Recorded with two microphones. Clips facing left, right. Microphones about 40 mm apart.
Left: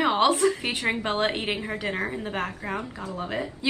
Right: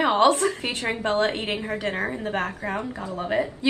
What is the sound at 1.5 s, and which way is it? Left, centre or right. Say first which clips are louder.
Speech: right 2 dB; centre.